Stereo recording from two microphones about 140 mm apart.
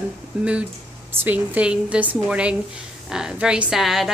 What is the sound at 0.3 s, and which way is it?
A woman's voice, 10° right (ahead or behind).